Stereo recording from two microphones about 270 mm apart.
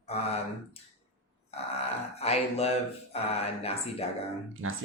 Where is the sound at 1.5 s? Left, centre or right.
Left.